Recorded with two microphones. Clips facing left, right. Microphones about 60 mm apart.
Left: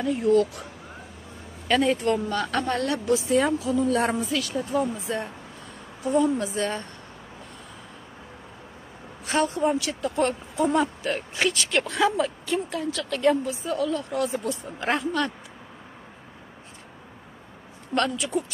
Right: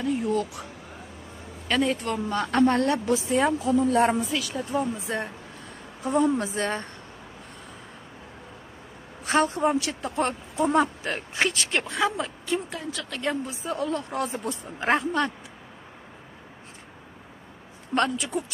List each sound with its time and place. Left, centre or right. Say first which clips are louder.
0.0 s speech: left 1 dB; centre
1.7 s speech: left 3 dB; centre
2.2 s speech: even; centre
2.5 s speech: right 8 dB; right
4.4 s speech: left 3 dB; centre
5.0 s speech: even; right
9.2 s speech: right 1 dB; right
11.9 s speech: left 3 dB; centre
13.7 s speech: left 1 dB; right
17.9 s speech: even; centre